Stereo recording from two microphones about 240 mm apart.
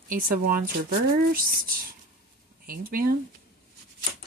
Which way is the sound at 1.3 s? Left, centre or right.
Right.